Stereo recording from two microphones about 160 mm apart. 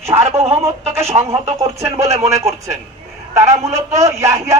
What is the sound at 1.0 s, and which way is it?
Speech, 40° right (ahead or behind).